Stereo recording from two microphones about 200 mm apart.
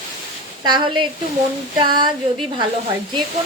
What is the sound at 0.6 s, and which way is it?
Speech, 20° right (ahead or behind).